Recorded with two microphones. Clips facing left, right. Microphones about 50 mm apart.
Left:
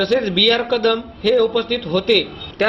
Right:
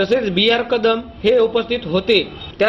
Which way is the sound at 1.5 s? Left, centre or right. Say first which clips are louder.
Right 1 dB; centre.